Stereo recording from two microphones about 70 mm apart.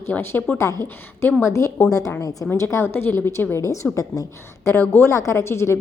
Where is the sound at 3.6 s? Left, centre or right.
Left.